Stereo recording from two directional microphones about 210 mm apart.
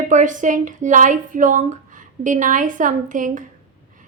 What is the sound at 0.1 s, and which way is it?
Speech, 35° right (ahead or behind).